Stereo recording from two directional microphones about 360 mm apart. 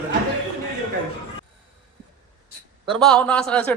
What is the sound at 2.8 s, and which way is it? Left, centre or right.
Speech, centre.